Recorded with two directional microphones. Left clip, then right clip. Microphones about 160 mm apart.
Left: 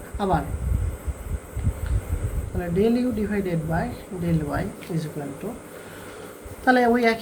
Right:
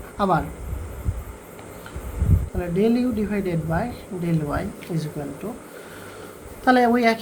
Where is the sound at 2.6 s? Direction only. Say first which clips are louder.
Right 1 dB; 35° right (ahead or behind).